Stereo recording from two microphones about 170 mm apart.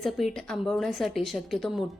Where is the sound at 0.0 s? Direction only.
Centre (ahead or behind).